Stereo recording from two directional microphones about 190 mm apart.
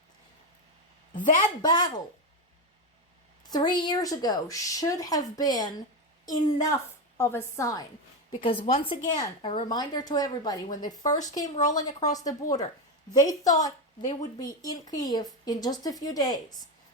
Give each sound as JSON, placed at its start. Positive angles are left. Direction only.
{"t": 1.6, "sound": "a woman's voice", "side_deg": 20}
{"t": 3.5, "sound": "a woman's voice", "side_deg": 20}
{"t": 8.3, "sound": "a woman's voice", "side_deg": 25}